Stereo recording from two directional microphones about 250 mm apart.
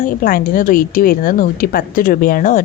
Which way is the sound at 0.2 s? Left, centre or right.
Left.